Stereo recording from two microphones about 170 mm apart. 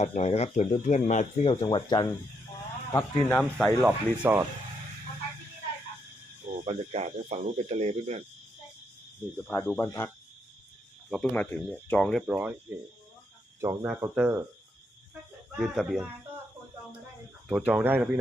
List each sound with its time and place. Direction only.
0.0 s speech: 40° left (ahead or behind)
1.6 s speech: 25° left (ahead or behind)
3.6 s speech: 5° right (ahead or behind)
6.7 s speech: 40° right (ahead or behind)
9.5 s speech: 10° left (ahead or behind)
11.1 s speech: 10° left (ahead or behind)
13.6 s speech: 15° right (ahead or behind)
15.6 s speech: centre (ahead or behind)
17.5 s speech: 5° right (ahead or behind)